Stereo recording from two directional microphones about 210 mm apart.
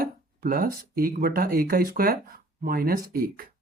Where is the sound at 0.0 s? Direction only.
45° right (ahead or behind).